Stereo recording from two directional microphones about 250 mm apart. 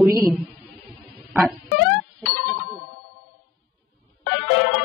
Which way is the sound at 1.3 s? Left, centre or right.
Centre.